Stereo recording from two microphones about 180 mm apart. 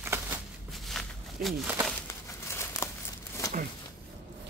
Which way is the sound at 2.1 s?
15° left (ahead or behind).